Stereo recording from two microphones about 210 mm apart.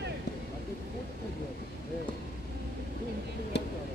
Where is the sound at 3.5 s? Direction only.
55° left (ahead or behind).